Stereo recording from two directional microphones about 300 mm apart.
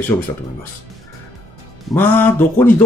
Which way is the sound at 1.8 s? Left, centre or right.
Centre.